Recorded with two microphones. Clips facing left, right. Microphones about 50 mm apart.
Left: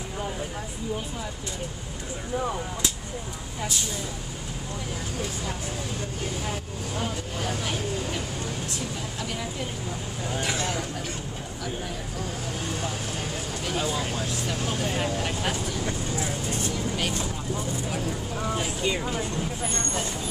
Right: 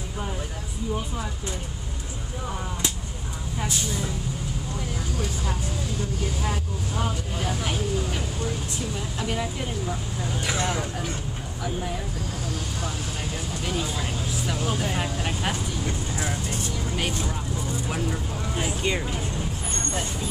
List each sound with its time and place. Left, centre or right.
7.0 s speech: centre
10.4 s speech: centre
13.7 s speech: centre
14.9 s speech: centre
16.9 s speech: centre
18.6 s speech: centre